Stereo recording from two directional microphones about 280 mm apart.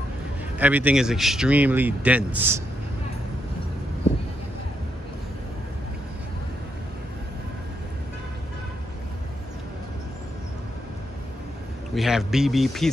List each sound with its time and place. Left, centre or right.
0.6 s speech: centre
11.9 s speech: centre